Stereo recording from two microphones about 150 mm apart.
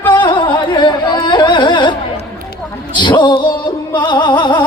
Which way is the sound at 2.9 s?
30° left (ahead or behind).